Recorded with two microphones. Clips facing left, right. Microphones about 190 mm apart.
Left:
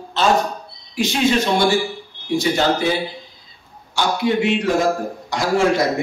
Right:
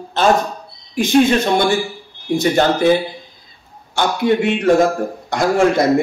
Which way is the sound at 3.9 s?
55° right (ahead or behind).